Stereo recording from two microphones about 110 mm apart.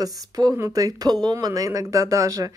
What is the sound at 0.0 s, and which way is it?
Speech, 35° right (ahead or behind).